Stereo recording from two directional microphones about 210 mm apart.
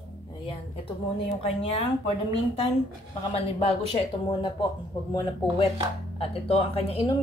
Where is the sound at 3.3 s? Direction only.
25° left (ahead or behind).